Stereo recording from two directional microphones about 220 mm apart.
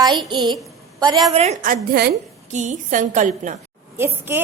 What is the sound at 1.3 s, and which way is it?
A woman's voice, 30° right (ahead or behind).